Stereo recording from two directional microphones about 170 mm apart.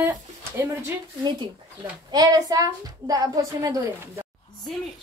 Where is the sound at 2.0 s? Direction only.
25° right (ahead or behind).